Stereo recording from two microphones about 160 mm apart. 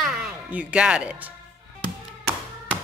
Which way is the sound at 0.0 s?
5° right (ahead or behind).